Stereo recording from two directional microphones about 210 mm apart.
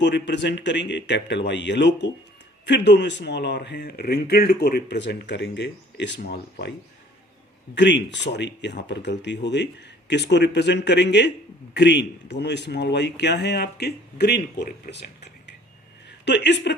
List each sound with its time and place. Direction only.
0.0 s speech: 55° left (ahead or behind)
7.8 s speech: 55° left (ahead or behind)